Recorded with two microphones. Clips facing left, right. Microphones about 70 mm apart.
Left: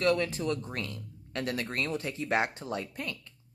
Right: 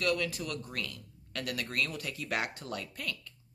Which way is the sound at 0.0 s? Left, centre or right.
Left.